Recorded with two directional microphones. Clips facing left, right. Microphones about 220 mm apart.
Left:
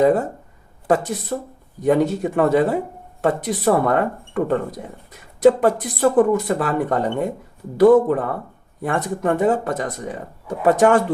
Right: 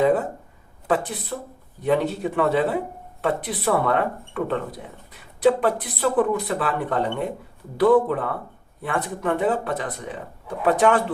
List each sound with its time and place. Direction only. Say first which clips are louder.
0.0 s speech: left 3 dB; 40° left (ahead or behind)